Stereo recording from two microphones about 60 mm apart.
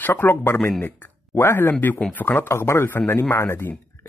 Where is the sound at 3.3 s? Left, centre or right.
Left.